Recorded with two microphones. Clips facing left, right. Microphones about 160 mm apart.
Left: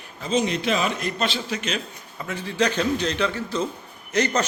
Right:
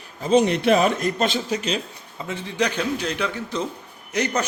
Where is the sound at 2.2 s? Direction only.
25° right (ahead or behind).